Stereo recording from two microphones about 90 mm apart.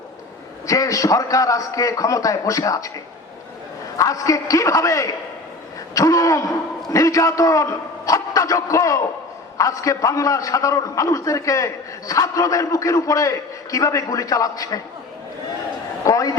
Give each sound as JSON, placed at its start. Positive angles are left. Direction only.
{"t": 0.7, "sound": "a man's voice", "side_deg": 40}
{"t": 3.9, "sound": "a man's voice", "side_deg": 40}
{"t": 16.0, "sound": "speech", "side_deg": 40}